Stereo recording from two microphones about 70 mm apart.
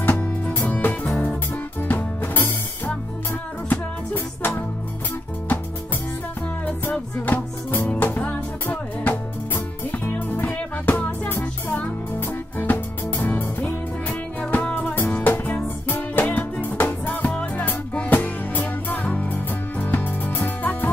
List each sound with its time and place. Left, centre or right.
0.0 s music: left
3.6 s music: left
6.6 s music: left